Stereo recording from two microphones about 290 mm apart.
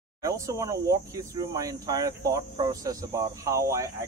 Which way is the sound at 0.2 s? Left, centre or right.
Centre.